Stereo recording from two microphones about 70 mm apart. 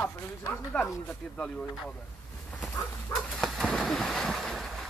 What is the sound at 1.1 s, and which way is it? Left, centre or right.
Speech, centre.